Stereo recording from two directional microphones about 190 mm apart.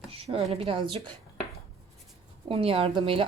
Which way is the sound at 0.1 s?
30° right (ahead or behind).